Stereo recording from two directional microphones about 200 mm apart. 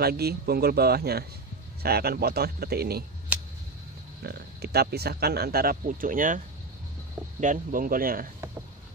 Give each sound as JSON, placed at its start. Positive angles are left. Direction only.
{"t": 0.0, "sound": "speech", "side_deg": -50}
{"t": 4.2, "sound": "speech", "side_deg": -50}